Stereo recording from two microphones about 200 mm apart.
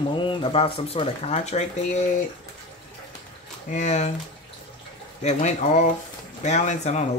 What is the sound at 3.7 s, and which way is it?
Speech, 35° left (ahead or behind).